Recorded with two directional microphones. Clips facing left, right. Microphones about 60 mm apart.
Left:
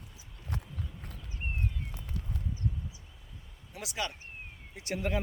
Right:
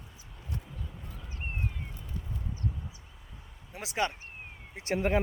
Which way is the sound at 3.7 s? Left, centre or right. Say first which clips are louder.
Right 5 dB; right.